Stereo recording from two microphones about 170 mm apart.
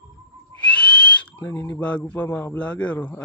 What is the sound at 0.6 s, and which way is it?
Speech, 5° left (ahead or behind).